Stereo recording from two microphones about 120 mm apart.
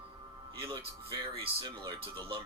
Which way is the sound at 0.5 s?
45° right (ahead or behind).